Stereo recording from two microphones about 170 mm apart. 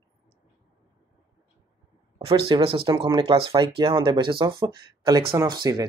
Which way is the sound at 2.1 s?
30° right (ahead or behind).